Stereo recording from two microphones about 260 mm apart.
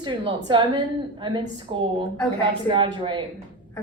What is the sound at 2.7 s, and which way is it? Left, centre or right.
Speech, centre.